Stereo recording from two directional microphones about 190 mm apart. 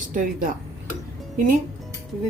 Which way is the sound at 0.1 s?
45° right (ahead or behind).